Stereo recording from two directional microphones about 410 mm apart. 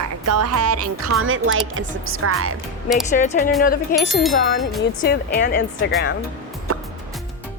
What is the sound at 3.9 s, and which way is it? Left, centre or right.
Speech, centre.